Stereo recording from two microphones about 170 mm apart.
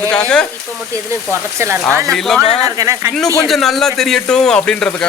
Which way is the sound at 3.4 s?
Centre (ahead or behind).